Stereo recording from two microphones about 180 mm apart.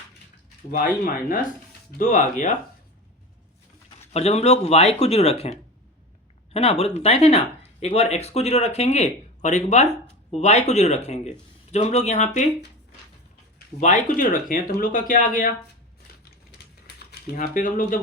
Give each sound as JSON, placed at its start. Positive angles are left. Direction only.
{"t": 2.0, "sound": "speech", "side_deg": 50}
{"t": 4.1, "sound": "speech", "side_deg": 35}
{"t": 13.7, "sound": "speech", "side_deg": 45}
{"t": 16.5, "sound": "a sound", "side_deg": 60}